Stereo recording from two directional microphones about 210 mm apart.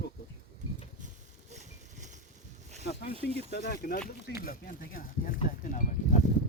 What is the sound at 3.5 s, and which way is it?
Speech, 45° left (ahead or behind).